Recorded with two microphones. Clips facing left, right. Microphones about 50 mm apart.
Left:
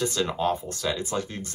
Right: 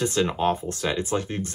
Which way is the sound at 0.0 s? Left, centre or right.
Right.